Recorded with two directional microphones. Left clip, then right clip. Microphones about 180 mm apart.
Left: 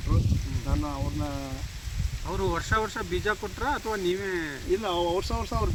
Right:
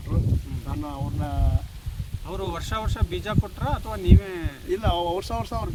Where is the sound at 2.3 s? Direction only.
40° right (ahead or behind).